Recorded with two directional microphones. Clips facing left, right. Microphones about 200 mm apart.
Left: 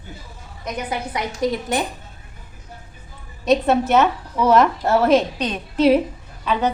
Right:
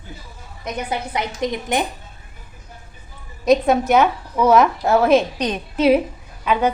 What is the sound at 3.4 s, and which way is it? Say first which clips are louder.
Speech: right 2 dB; 10° right (ahead or behind).